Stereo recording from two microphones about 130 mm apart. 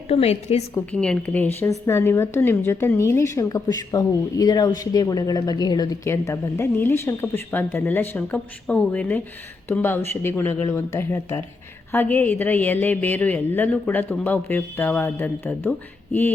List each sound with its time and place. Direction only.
0.1 s a woman's voice: 55° left (ahead or behind)
0.9 s a woman's voice: 5° left (ahead or behind); by 6.0 s 30° left (ahead or behind)
6.1 s a woman's voice: 20° left (ahead or behind)